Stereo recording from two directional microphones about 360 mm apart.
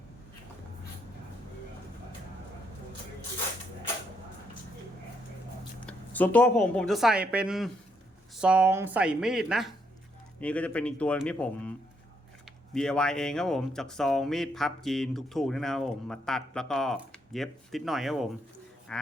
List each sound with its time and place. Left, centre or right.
5.8 s speech: centre
12.7 s speech: centre
18.9 s livestock: centre